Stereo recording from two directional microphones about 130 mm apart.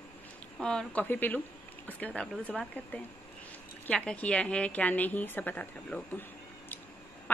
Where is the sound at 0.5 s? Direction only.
5° left (ahead or behind).